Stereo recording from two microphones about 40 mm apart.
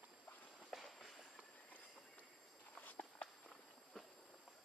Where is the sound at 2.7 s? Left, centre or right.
Left.